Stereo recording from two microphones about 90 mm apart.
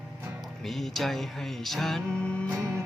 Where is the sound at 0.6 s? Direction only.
Centre (ahead or behind).